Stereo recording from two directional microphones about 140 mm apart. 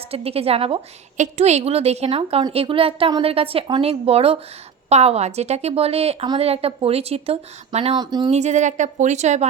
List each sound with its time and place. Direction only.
0.1 s a woman's voice: 45° right (ahead or behind)
7.9 s speech: 30° right (ahead or behind)
8.3 s speech: 55° right (ahead or behind)